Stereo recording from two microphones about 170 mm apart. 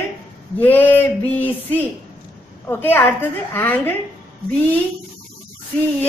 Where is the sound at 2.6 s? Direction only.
10° left (ahead or behind).